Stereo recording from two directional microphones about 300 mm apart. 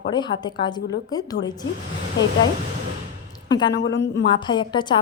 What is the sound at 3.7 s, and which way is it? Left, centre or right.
Speech, left.